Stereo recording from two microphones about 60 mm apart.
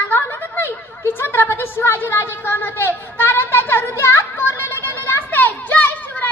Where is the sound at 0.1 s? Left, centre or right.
Left.